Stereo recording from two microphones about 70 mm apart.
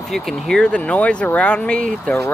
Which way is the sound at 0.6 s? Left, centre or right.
Centre.